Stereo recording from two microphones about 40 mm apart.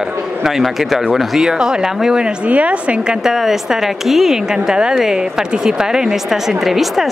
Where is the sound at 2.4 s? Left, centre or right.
Right.